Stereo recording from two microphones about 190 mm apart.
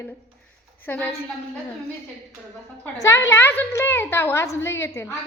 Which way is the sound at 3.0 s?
15° left (ahead or behind).